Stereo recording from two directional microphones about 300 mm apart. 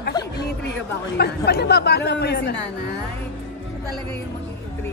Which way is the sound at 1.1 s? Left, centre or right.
Left.